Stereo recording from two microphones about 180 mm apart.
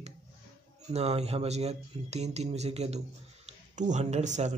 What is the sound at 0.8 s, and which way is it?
Speech, 35° right (ahead or behind).